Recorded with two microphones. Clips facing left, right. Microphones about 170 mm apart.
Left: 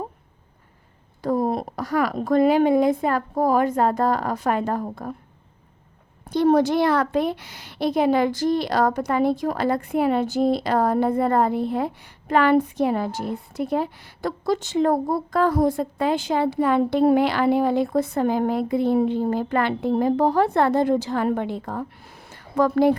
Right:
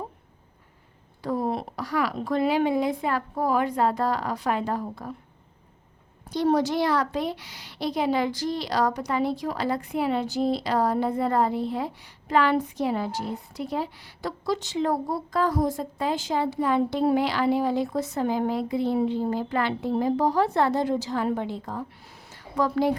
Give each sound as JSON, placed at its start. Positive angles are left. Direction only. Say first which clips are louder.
{"t": 1.2, "sound": "a woman's voice", "louder": "left 5 dB", "side_deg": 45}
{"t": 6.2, "sound": "a woman's voice", "louder": "left 5 dB", "side_deg": 55}
{"t": 22.3, "sound": "a sound", "louder": "left 5 dB", "side_deg": 55}